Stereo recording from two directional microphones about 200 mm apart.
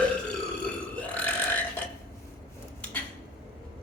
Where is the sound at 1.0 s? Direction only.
10° left (ahead or behind).